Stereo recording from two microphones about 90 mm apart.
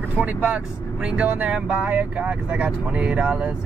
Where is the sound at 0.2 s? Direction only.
20° right (ahead or behind).